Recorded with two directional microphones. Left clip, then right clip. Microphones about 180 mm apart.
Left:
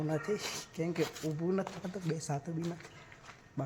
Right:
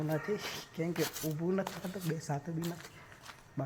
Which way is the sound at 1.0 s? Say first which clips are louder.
Left 1 dB; 10° right (ahead or behind).